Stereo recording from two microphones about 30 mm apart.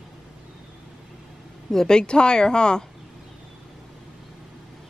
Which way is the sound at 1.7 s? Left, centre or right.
Centre.